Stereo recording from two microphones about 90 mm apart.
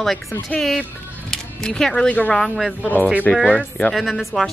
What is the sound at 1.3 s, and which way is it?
Speech, 5° left (ahead or behind).